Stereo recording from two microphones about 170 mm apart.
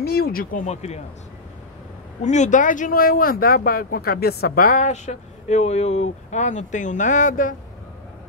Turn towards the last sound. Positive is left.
turn(degrees=50)  # may be behind; listen again after turning